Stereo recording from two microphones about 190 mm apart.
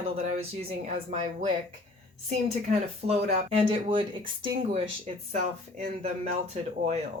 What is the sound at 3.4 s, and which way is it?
Speech, 30° right (ahead or behind).